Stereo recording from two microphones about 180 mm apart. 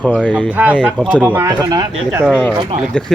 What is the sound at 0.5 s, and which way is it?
Speech, 10° right (ahead or behind).